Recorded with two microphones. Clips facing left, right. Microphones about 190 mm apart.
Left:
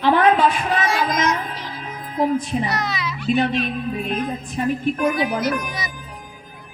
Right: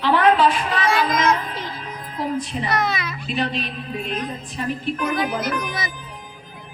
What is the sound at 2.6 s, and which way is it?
Speech, 55° right (ahead or behind).